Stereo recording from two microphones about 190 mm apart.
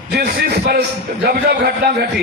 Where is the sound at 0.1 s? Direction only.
55° right (ahead or behind).